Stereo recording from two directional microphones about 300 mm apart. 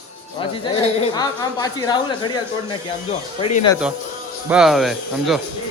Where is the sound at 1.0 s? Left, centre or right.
Centre.